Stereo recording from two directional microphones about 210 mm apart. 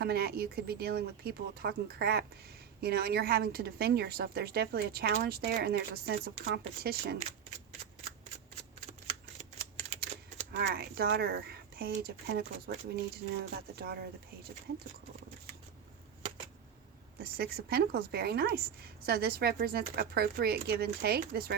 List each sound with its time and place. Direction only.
0.0 s a woman's voice: 50° right (ahead or behind)
8.9 s typewriter: 30° right (ahead or behind)
10.6 s a woman's voice: 50° right (ahead or behind)
17.2 s a woman's voice: 45° right (ahead or behind)